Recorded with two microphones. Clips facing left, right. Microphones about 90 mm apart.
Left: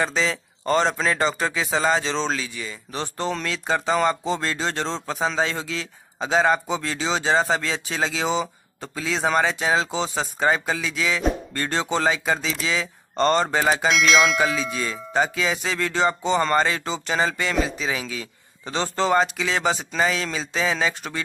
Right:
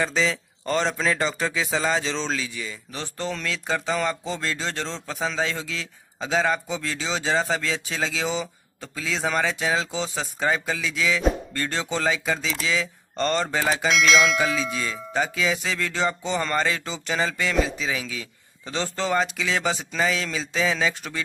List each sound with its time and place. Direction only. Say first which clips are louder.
0.0 s speech: left 1 dB; 15° left (ahead or behind)
10.4 s speech: left 2 dB; 20° left (ahead or behind)
11.0 s speech: right 2 dB; 15° left (ahead or behind)
13.2 s speech: left 4 dB; 30° left (ahead or behind)
13.8 s bell: right 2 dB; centre (ahead or behind)
14.8 s speech: left 3 dB; 20° left (ahead or behind)